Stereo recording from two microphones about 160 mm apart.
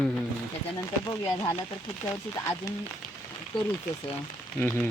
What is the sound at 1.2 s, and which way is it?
Speech, 20° left (ahead or behind).